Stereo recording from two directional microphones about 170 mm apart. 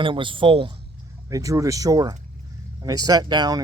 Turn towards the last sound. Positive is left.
turn(degrees=-25)  # may be behind; listen again after turning